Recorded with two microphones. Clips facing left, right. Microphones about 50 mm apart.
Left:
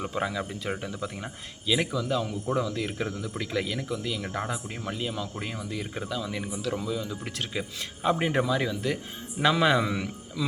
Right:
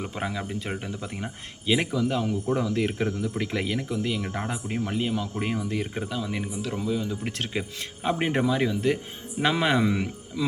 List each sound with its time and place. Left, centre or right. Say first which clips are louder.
0.0 s speech: left 1 dB; right
5.9 s speech: right 2 dB; right